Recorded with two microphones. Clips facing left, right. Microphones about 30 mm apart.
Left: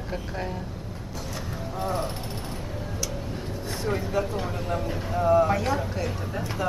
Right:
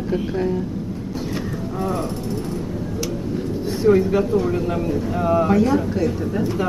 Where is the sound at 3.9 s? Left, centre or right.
Centre.